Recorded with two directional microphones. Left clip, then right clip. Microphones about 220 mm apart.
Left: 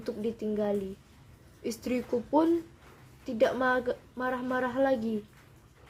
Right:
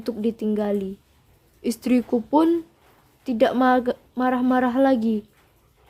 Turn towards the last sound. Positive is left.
turn(degrees=-40)  # may be behind; listen again after turning